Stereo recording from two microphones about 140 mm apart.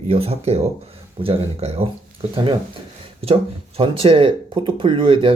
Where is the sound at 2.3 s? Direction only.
35° right (ahead or behind).